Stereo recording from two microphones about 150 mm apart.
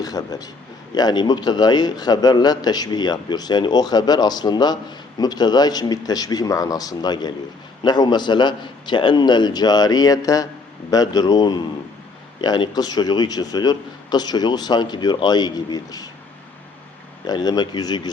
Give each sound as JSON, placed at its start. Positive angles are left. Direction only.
{"t": 0.0, "sound": "a man's voice", "side_deg": 25}
{"t": 17.2, "sound": "a man's voice", "side_deg": 25}